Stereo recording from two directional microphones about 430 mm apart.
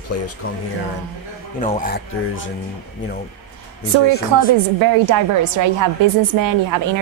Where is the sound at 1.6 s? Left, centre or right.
Centre.